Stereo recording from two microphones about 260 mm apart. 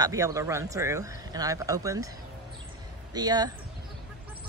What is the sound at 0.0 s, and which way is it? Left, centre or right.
Speech, centre.